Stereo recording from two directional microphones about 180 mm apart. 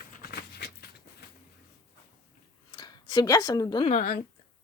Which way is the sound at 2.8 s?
20° left (ahead or behind).